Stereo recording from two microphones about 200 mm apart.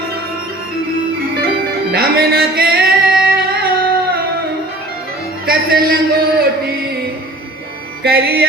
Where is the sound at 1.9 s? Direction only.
50° right (ahead or behind).